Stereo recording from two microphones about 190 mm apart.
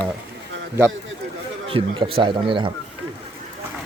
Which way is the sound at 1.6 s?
30° right (ahead or behind).